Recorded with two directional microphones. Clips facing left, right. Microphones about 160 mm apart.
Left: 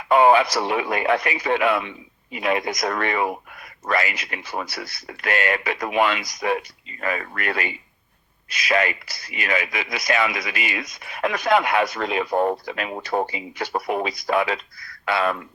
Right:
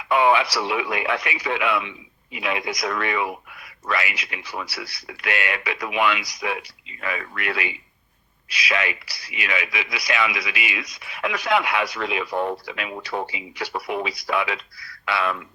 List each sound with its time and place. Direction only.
0.0 s speech: 45° left (ahead or behind)